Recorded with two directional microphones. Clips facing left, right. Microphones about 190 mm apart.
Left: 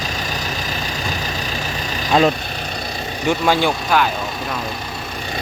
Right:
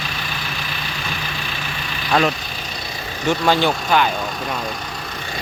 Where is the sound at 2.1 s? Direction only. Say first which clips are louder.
Left 3 dB; 20° left (ahead or behind).